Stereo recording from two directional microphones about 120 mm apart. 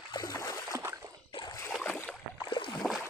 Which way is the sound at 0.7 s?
25° right (ahead or behind).